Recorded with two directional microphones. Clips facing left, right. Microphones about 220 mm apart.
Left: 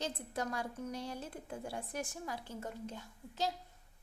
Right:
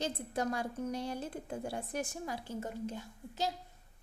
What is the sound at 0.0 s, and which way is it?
A child's voice, 15° right (ahead or behind).